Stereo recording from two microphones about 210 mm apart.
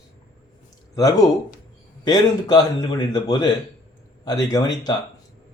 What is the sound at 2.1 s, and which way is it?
A man's voice, 20° left (ahead or behind).